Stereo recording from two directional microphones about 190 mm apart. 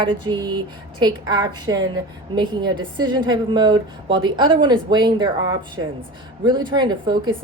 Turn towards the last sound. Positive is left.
turn(degrees=-25)  # may be behind; listen again after turning